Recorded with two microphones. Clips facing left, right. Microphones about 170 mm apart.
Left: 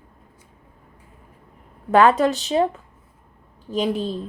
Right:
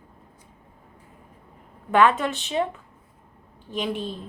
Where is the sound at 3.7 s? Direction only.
40° left (ahead or behind).